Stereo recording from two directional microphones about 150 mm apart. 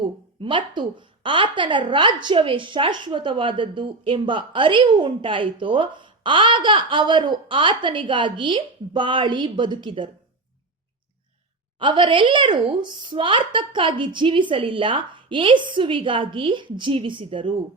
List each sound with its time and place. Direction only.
0.0 s a sound: 35° right (ahead or behind)
0.8 s a woman's voice: 30° right (ahead or behind)
11.8 s a woman's voice: 35° right (ahead or behind)